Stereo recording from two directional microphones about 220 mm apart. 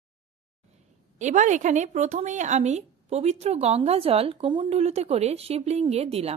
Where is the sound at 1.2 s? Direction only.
35° right (ahead or behind).